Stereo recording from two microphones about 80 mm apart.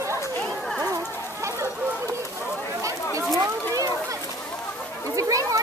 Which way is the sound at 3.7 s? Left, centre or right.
Right.